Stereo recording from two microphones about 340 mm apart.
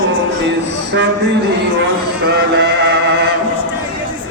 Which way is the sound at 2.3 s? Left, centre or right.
Right.